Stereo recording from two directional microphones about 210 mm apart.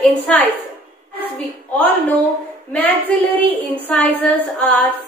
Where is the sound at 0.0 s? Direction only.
5° left (ahead or behind).